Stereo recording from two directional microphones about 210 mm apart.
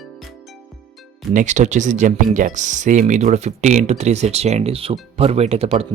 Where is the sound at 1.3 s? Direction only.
35° right (ahead or behind).